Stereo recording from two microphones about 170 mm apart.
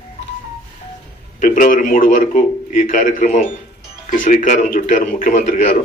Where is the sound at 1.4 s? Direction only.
50° left (ahead or behind).